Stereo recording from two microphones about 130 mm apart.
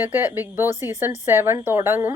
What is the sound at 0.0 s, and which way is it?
A woman's voice, 15° right (ahead or behind).